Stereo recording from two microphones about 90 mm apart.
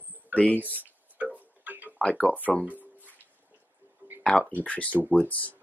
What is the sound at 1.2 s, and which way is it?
Tick-tock, 20° right (ahead or behind).